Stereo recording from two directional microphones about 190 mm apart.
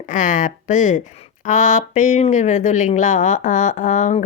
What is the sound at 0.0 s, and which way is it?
Speech, 40° left (ahead or behind).